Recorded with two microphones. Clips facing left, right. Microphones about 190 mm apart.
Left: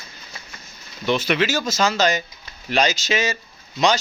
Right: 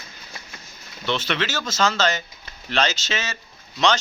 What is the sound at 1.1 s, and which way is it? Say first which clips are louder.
Speech: left 5 dB; 10° left (ahead or behind).